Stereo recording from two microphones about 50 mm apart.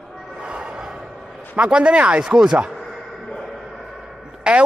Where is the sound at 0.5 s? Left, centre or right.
Centre.